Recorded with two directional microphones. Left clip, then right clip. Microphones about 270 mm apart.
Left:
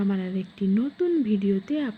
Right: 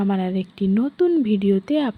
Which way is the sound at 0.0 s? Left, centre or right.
Centre.